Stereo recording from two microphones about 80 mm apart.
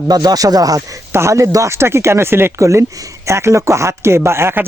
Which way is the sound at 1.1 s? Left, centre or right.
Right.